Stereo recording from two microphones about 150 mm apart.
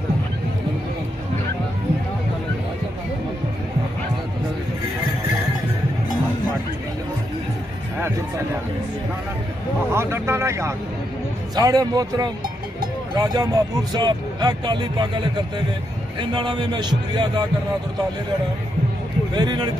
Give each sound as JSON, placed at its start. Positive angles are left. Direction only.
{"t": 9.8, "sound": "speech", "side_deg": -15}
{"t": 16.2, "sound": "speech", "side_deg": -30}
{"t": 19.3, "sound": "speech", "side_deg": -30}